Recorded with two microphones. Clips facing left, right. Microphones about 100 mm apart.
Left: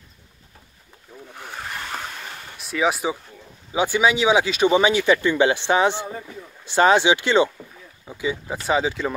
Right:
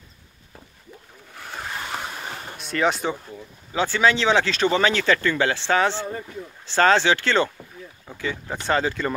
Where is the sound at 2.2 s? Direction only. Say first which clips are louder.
Right 3 dB; 30° right (ahead or behind).